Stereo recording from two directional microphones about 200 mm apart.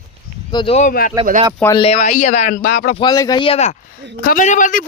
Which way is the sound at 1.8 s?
30° left (ahead or behind).